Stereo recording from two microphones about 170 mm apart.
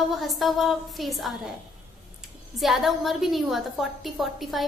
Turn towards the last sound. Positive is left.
turn(degrees=0)  # may be behind; listen again after turning